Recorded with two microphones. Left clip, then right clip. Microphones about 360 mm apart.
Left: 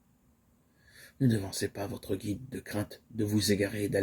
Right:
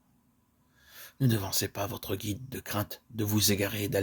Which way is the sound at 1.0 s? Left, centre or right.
Right.